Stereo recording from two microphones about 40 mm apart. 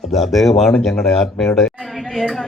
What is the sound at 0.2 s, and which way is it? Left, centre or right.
Speech, centre.